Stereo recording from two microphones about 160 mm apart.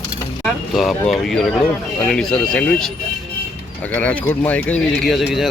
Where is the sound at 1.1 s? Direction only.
Centre (ahead or behind).